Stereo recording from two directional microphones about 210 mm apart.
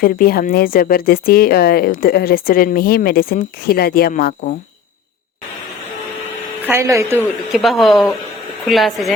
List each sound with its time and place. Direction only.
0.0 s speech: 45° left (ahead or behind)
6.7 s speech: 15° right (ahead or behind)
7.5 s speech: centre (ahead or behind)